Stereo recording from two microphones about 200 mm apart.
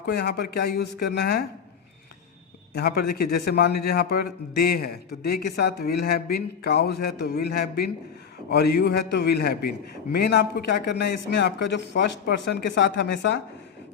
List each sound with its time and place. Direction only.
0.0 s speech: 55° left (ahead or behind)
2.7 s a man's voice: 55° left (ahead or behind)